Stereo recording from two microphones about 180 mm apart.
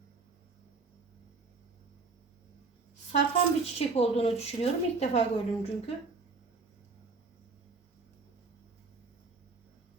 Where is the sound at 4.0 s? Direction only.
35° left (ahead or behind).